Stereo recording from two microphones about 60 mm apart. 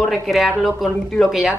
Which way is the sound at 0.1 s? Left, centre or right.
Centre.